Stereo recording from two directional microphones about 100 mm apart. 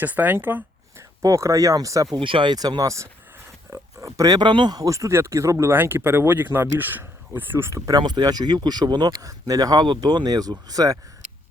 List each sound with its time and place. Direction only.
0.0 s speech: 15° right (ahead or behind)
1.2 s speech: 30° right (ahead or behind)
2.1 s speech: 60° right (ahead or behind)
4.8 s speech: 30° right (ahead or behind)
5.7 s speech: 20° right (ahead or behind)
7.9 s speech: 45° right (ahead or behind)